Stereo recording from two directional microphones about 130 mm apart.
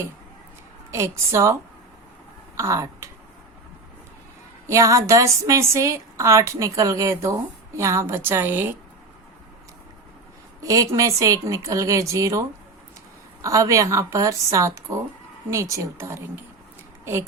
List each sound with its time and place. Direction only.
0.9 s a woman's voice: 20° right (ahead or behind)
2.6 s speech: 25° right (ahead or behind)
4.6 s a woman's voice: 25° right (ahead or behind)
10.6 s a woman's voice: 25° right (ahead or behind)